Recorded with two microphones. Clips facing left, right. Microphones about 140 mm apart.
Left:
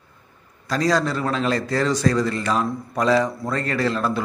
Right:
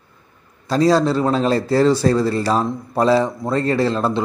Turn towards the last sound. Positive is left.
turn(degrees=-30)  # may be behind; listen again after turning